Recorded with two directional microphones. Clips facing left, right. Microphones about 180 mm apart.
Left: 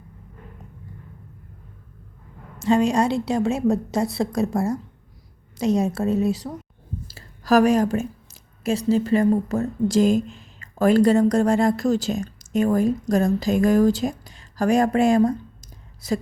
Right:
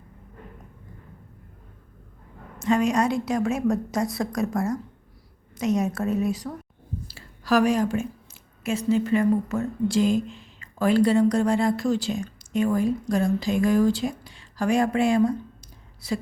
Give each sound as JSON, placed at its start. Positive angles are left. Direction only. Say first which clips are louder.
{"t": 2.6, "sound": "a woman's voice", "louder": "left 3 dB", "side_deg": 30}
{"t": 7.1, "sound": "a woman's voice", "louder": "left 4 dB", "side_deg": 45}